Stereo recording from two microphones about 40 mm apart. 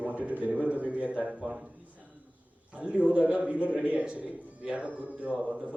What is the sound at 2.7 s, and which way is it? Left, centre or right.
A man's voice, right.